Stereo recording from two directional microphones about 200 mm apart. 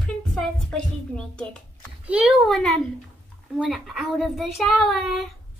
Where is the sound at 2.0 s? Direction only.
5° right (ahead or behind).